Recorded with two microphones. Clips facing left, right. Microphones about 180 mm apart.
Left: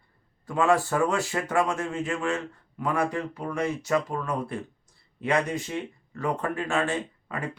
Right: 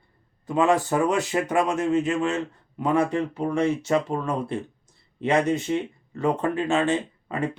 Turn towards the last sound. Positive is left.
turn(degrees=-25)  # may be behind; listen again after turning